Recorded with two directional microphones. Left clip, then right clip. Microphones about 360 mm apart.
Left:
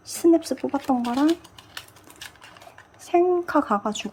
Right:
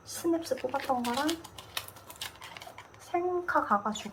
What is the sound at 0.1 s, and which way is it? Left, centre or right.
Speech, left.